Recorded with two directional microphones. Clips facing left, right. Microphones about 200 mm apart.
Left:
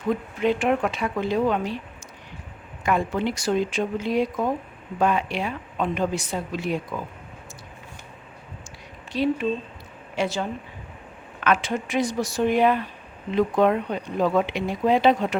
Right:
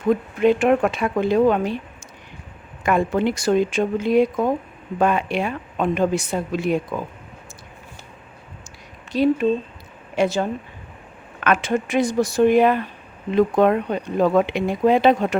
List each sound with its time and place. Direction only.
0.3 s speech: 55° right (ahead or behind)
2.8 s speech: 50° right (ahead or behind)
9.1 s speech: 45° right (ahead or behind)
11.4 s speech: 50° right (ahead or behind)